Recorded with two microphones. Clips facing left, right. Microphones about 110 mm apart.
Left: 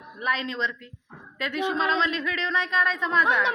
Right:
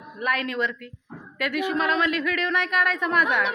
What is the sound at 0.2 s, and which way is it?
A woman's voice, 20° left (ahead or behind).